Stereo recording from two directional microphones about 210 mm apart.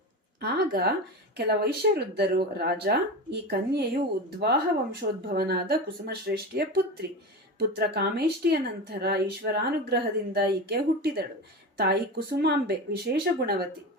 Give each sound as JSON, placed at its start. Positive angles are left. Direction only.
{"t": 0.3, "sound": "speech", "side_deg": -50}